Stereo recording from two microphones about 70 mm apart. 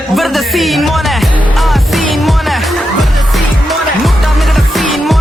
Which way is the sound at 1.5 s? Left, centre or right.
Centre.